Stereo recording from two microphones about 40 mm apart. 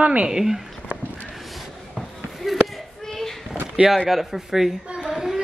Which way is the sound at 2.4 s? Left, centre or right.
Centre.